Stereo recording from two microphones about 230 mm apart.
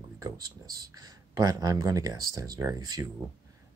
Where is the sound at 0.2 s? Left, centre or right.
Centre.